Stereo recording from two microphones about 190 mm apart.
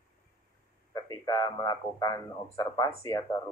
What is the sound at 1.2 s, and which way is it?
Speech, 20° left (ahead or behind).